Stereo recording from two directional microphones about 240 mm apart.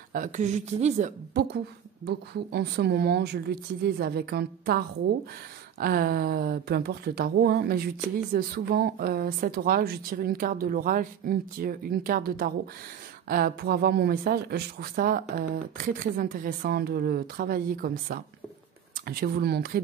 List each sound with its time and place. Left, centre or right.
0.1 s a woman's voice: right